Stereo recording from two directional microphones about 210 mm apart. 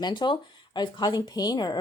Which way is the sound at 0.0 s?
20° left (ahead or behind).